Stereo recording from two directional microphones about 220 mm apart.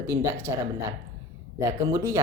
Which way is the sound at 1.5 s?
15° right (ahead or behind).